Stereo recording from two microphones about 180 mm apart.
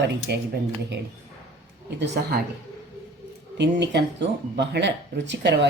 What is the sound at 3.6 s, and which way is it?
A woman's voice, 70° right (ahead or behind).